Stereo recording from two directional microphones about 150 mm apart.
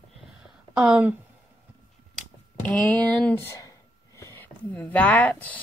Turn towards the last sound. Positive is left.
turn(degrees=10)  # may be behind; listen again after turning